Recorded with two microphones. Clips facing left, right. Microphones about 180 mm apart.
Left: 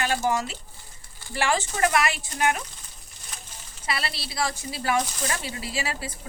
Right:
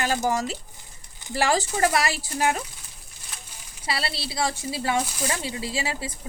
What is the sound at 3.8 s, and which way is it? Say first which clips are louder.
Speech: right 2 dB; 30° right (ahead or behind).